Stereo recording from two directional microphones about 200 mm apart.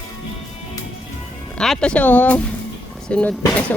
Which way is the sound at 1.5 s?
5° left (ahead or behind).